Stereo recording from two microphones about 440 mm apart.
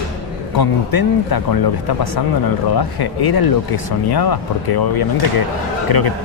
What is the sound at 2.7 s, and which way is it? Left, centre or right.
A man's voice, left.